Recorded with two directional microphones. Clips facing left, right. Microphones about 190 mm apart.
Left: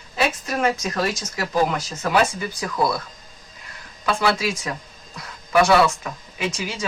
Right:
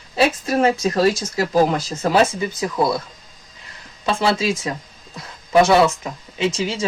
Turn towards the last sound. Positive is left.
turn(degrees=-25)  # may be behind; listen again after turning